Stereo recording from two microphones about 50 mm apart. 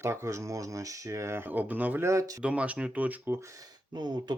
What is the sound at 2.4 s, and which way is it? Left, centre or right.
Speech, right.